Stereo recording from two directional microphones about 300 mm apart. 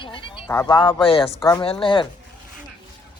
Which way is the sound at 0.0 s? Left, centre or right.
Centre.